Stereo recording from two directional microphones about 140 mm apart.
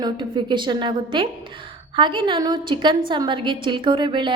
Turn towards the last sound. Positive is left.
turn(degrees=-35)  # may be behind; listen again after turning